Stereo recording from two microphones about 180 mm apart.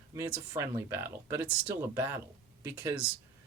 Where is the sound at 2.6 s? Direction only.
10° right (ahead or behind).